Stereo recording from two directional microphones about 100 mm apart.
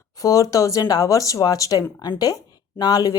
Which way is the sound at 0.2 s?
35° left (ahead or behind).